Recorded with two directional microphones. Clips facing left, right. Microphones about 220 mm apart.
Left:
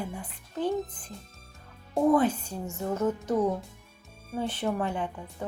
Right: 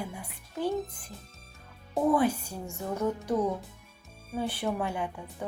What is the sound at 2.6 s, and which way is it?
Speech, centre (ahead or behind).